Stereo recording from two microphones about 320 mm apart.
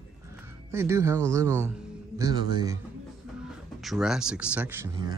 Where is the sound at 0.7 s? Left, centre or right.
Centre.